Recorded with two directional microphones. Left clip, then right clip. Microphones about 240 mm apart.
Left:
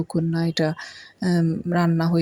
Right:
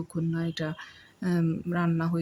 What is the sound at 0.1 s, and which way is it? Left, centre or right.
Speech, left.